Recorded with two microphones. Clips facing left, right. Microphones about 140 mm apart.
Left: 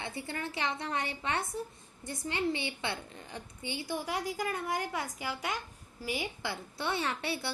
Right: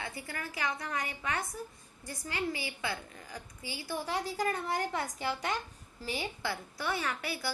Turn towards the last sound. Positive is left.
turn(degrees=25)  # may be behind; listen again after turning